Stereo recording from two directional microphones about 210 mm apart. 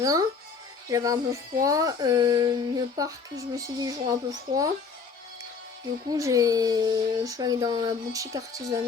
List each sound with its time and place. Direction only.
0.0 s speech: 15° right (ahead or behind)
6.1 s speech: 15° right (ahead or behind)